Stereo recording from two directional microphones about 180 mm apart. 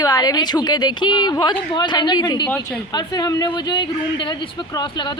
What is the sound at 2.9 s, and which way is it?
Speech, 25° left (ahead or behind).